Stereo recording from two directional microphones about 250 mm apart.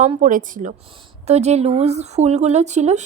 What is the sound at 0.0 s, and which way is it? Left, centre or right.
Speech, right.